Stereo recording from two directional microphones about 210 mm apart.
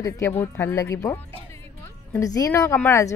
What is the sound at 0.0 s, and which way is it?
Speech, 15° left (ahead or behind).